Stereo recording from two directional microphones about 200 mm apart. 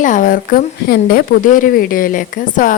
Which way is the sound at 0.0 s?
40° left (ahead or behind).